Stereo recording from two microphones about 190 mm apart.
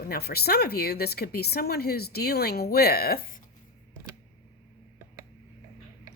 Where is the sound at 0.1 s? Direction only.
55° left (ahead or behind).